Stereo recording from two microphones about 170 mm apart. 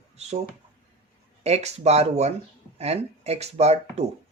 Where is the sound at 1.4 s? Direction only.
40° right (ahead or behind).